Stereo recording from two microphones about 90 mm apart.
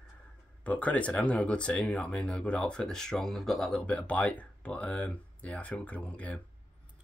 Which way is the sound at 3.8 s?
15° left (ahead or behind).